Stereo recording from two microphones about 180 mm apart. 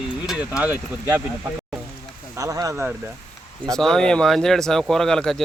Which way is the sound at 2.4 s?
20° right (ahead or behind).